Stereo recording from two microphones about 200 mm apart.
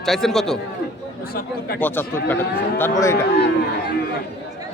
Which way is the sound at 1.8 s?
10° left (ahead or behind).